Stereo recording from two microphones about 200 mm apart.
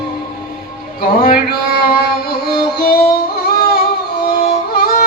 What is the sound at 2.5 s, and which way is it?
Music, 50° left (ahead or behind).